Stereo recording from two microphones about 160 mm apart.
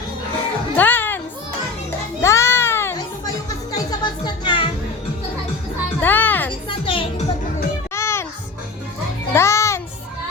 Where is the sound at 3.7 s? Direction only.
25° left (ahead or behind).